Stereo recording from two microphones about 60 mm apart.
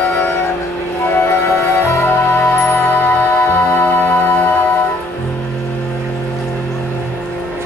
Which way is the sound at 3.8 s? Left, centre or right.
Left.